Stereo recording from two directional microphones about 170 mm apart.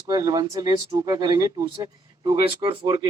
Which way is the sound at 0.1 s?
25° right (ahead or behind).